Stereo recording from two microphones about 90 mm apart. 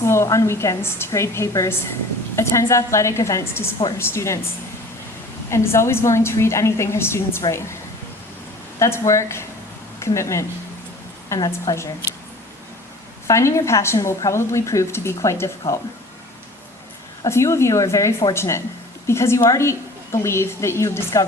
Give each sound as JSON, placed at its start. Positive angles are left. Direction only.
{"t": 0.0, "sound": "a woman's voice", "side_deg": 30}
{"t": 5.5, "sound": "a woman's voice", "side_deg": 30}
{"t": 8.8, "sound": "a woman's voice", "side_deg": 35}
{"t": 13.2, "sound": "a woman's voice", "side_deg": 35}
{"t": 17.2, "sound": "a woman's voice", "side_deg": 30}